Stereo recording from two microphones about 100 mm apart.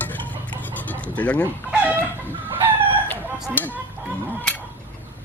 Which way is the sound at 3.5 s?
15° left (ahead or behind).